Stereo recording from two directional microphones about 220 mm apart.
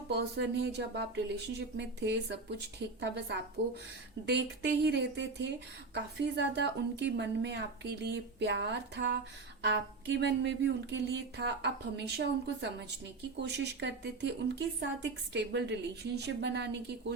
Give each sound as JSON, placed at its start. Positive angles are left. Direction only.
{"t": 0.1, "sound": "speech", "side_deg": -50}